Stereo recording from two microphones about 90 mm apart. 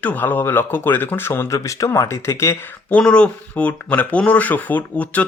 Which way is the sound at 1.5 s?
35° left (ahead or behind).